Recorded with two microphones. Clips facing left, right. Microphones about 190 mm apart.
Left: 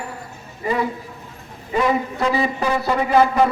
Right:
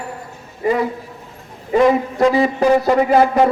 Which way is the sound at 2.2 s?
45° right (ahead or behind).